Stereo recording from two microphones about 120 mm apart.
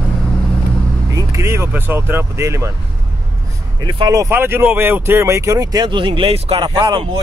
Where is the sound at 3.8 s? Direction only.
30° right (ahead or behind).